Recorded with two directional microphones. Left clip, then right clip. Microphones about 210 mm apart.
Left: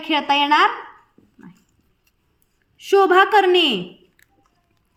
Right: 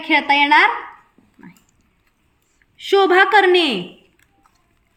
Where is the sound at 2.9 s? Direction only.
Centre (ahead or behind).